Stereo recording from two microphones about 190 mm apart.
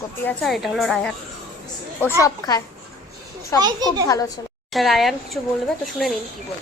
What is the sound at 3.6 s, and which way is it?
Speech, 20° right (ahead or behind).